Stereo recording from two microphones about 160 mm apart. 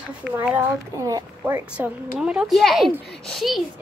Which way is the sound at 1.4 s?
10° right (ahead or behind).